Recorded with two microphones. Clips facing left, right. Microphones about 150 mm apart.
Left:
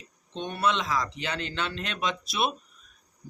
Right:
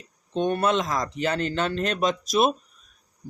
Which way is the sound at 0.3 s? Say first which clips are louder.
Right 6 dB; 50° right (ahead or behind).